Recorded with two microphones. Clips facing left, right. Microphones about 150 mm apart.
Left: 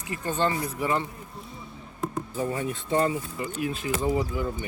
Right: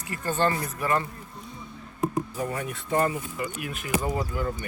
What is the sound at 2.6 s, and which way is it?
Speech, 20° left (ahead or behind).